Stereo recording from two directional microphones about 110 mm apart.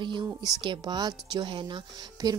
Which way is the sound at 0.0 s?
40° right (ahead or behind).